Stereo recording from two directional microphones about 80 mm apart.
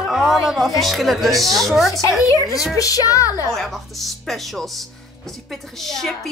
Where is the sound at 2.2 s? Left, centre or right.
Left.